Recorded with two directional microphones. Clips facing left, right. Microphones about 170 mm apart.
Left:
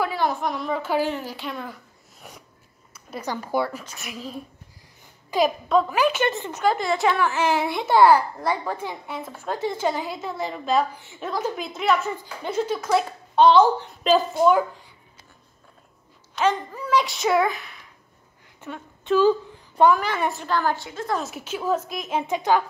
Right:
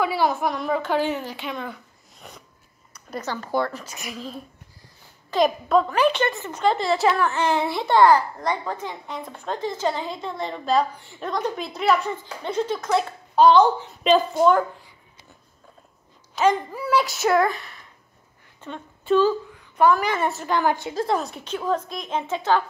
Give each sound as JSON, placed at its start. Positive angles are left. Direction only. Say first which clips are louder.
{"t": 0.1, "sound": "a woman's voice", "louder": "right 2 dB", "side_deg": -5}
{"t": 6.2, "sound": "a woman's voice", "louder": "left 1 dB", "side_deg": 15}
{"t": 6.6, "sound": "a child's voice", "louder": "right 1 dB", "side_deg": 0}
{"t": 16.3, "sound": "a child's voice", "louder": "right 2 dB", "side_deg": -10}
{"t": 19.5, "sound": "a sound", "louder": "left 1 dB", "side_deg": 30}
{"t": 20.2, "sound": "a child's voice", "louder": "right 1 dB", "side_deg": 0}
{"t": 20.4, "sound": "a woman's voice", "louder": "right 2 dB", "side_deg": -20}
{"t": 20.9, "sound": "a woman's voice", "louder": "right 4 dB", "side_deg": -35}
{"t": 21.2, "sound": "a woman's voice", "louder": "even", "side_deg": 5}